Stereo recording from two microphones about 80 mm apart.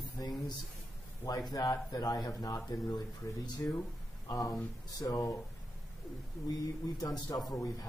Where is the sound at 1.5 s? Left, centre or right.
Left.